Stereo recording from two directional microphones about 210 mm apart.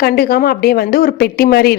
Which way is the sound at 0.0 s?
45° left (ahead or behind).